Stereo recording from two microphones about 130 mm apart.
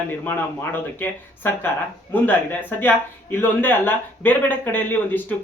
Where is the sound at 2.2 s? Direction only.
15° left (ahead or behind).